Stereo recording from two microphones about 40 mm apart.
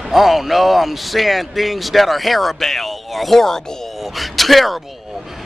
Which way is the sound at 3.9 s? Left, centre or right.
Centre.